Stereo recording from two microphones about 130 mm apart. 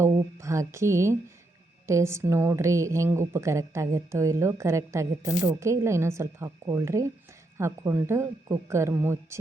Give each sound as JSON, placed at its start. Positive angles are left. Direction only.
{"t": 0.0, "sound": "a woman's voice", "side_deg": -25}